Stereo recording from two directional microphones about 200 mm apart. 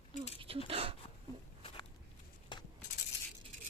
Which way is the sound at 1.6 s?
25° left (ahead or behind).